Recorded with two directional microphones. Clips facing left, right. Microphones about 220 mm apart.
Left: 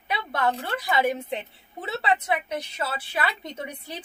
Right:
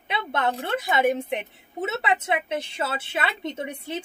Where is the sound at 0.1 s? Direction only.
25° right (ahead or behind).